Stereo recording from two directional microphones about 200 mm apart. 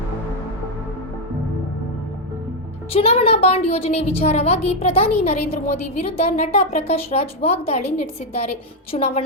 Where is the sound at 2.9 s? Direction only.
30° left (ahead or behind).